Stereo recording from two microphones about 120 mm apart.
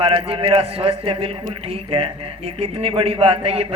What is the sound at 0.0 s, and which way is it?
A man's voice, 50° right (ahead or behind).